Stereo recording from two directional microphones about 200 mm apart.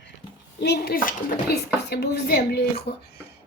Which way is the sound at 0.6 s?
55° left (ahead or behind).